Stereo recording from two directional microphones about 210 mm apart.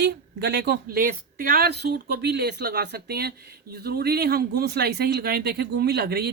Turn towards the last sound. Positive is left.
turn(degrees=-50)  # may be behind; listen again after turning